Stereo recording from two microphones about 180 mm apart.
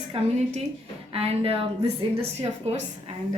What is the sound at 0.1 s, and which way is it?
Speech, 35° right (ahead or behind).